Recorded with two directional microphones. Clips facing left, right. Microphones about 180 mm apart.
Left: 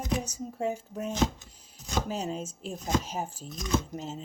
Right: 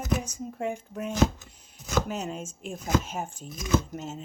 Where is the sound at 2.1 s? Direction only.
30° left (ahead or behind).